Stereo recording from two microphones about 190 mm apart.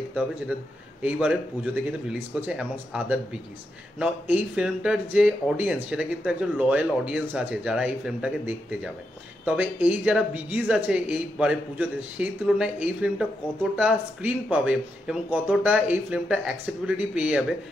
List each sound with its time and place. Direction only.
0.5 s speech: 5° right (ahead or behind)